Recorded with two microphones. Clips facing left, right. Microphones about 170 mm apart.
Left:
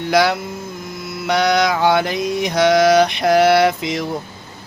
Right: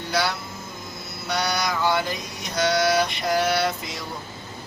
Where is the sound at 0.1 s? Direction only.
90° left.